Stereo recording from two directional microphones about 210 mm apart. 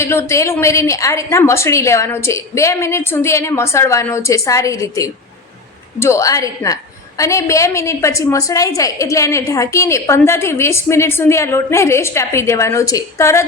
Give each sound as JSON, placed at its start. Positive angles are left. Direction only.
{"t": 0.0, "sound": "a woman's voice", "side_deg": 10}